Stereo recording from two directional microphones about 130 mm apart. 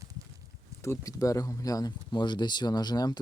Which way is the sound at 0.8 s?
25° left (ahead or behind).